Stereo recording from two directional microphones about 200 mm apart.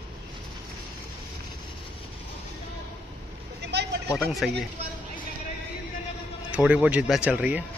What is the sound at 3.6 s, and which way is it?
Vehicle, 55° right (ahead or behind).